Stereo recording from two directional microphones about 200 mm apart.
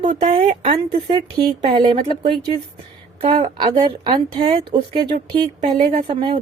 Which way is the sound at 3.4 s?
25° right (ahead or behind).